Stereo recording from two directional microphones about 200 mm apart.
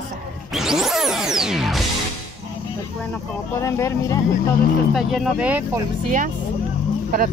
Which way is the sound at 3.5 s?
15° left (ahead or behind).